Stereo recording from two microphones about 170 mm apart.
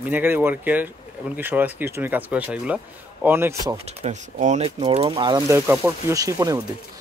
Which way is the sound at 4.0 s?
45° right (ahead or behind).